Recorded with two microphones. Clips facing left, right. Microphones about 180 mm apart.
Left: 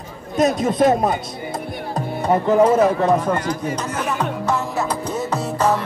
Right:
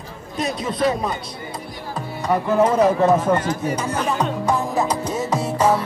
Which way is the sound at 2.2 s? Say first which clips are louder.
Left 3 dB; 20° left (ahead or behind).